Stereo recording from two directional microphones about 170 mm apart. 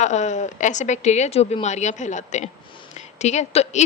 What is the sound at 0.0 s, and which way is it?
A woman's voice, 45° left (ahead or behind).